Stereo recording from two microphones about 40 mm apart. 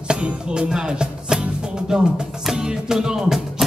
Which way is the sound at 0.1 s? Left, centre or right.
Right.